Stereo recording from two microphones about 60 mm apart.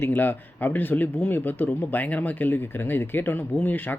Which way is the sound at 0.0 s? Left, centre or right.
Left.